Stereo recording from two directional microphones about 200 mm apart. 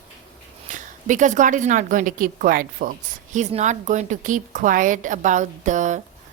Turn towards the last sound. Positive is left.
turn(degrees=-40)  # may be behind; listen again after turning